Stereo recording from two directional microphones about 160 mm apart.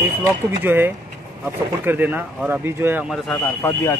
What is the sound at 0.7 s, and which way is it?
Speech, 15° right (ahead or behind).